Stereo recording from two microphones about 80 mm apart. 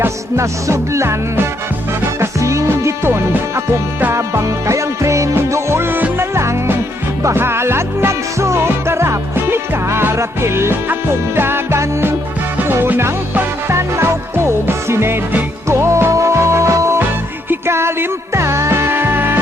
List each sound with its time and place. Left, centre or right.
0.0 s music: right
2.2 s music: right